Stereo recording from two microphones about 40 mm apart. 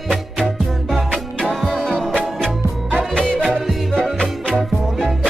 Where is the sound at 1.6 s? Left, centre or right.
Centre.